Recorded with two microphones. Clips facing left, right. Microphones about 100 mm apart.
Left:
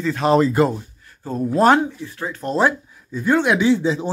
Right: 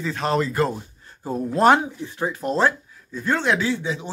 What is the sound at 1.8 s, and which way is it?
Speech, 20° right (ahead or behind).